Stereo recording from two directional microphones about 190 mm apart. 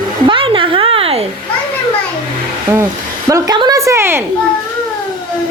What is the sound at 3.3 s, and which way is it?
Speech, 20° right (ahead or behind).